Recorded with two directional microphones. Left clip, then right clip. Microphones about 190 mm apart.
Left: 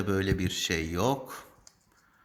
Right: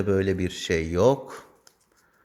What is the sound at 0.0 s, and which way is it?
Speech, 40° right (ahead or behind).